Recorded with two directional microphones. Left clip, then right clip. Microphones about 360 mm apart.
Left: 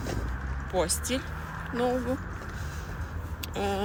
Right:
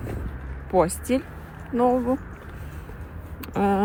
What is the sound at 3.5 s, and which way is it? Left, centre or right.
Speech, centre.